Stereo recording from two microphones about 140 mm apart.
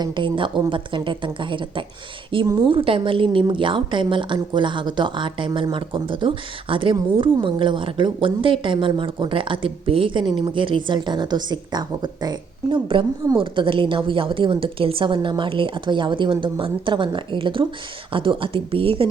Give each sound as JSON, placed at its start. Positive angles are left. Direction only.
{"t": 0.0, "sound": "a woman's voice", "side_deg": -35}